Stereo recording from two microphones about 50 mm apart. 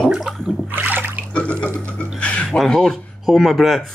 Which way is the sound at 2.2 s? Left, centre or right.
Left.